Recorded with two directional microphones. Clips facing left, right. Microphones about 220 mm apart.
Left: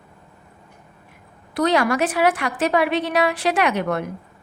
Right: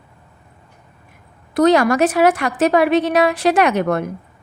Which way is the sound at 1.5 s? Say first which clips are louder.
Right 6 dB; 45° right (ahead or behind).